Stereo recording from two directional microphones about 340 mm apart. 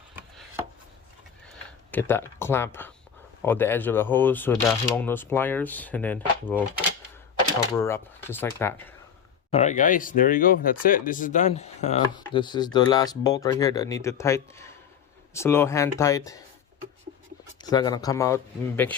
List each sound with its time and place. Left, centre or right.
0.2 s chopping: centre
1.9 s speech: centre
7.7 s speech: centre
9.5 s speech: centre
17.6 s speech: centre